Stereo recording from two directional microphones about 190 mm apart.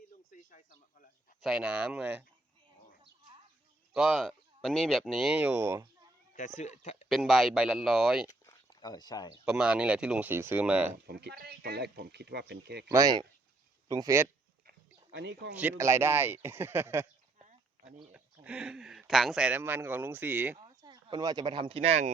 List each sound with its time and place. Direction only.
0.3 s a sound: 45° left (ahead or behind)
1.4 s speech: 5° right (ahead or behind)
3.9 s speech: 5° right (ahead or behind)
6.3 s speech: 40° left (ahead or behind)
7.1 s speech: centre (ahead or behind)
8.4 s a sound: 20° left (ahead or behind)
9.5 s speech: 5° right (ahead or behind)
11.0 s speech: 60° right (ahead or behind)
12.9 s speech: 20° right (ahead or behind)
14.7 s a sound: 65° right (ahead or behind)
15.5 s speech: 10° right (ahead or behind)
18.1 s speech: 5° right (ahead or behind)
20.6 s speech: 20° right (ahead or behind)